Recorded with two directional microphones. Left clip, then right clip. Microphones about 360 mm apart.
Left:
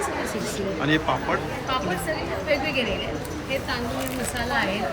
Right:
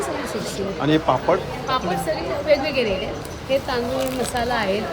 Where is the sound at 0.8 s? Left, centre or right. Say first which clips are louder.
Right 4 dB; centre.